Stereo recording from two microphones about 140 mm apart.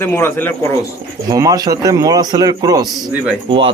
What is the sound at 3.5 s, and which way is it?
Speech, 40° right (ahead or behind).